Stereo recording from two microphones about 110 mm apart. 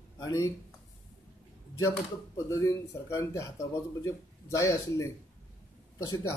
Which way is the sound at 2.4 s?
30° left (ahead or behind).